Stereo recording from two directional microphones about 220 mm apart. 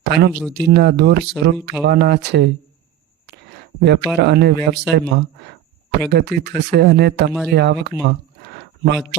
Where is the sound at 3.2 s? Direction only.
50° right (ahead or behind).